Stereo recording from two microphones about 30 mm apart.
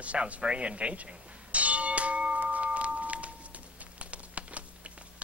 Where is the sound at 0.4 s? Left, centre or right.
Right.